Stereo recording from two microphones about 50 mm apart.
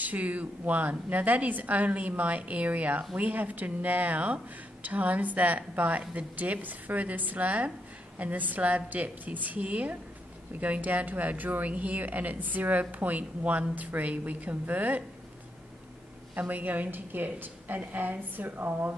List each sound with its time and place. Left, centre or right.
0.0 s speech: right
16.3 s speech: right